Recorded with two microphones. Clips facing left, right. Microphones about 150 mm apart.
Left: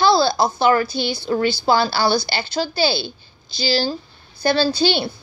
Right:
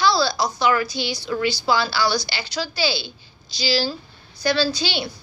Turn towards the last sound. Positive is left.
turn(degrees=55)  # may be behind; listen again after turning